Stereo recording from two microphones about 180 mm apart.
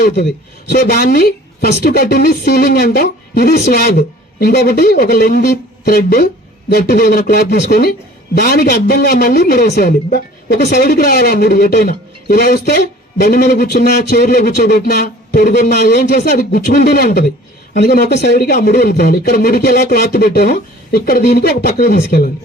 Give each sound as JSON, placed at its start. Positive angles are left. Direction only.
{"t": 0.2, "sound": "a woman's voice", "side_deg": 65}